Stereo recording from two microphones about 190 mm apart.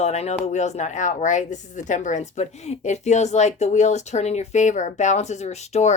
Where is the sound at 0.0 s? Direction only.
35° left (ahead or behind).